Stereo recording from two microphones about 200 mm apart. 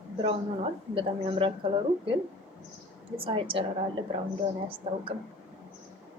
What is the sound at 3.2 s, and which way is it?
Speech, 25° right (ahead or behind).